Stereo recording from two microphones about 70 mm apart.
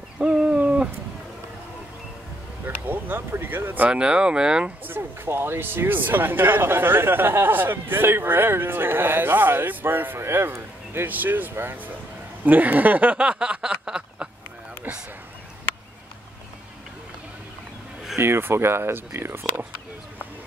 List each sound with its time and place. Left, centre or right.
0.2 s owl: centre
2.6 s speech: right; by 4.7 s centre
4.8 s speech: right
12.4 s a sound: right
18.1 s speech: right